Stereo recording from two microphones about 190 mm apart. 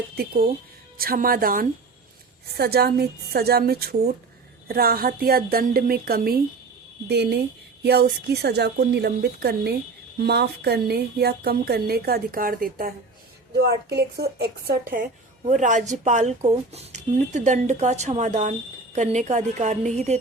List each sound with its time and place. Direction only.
0.9 s a woman's voice: 50° right (ahead or behind)